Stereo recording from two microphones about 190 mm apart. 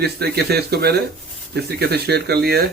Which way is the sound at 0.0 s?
60° right (ahead or behind).